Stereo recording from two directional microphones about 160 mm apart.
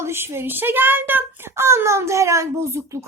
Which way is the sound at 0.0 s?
15° right (ahead or behind).